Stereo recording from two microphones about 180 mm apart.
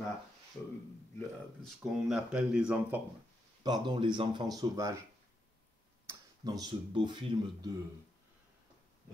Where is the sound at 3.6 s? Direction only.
25° right (ahead or behind).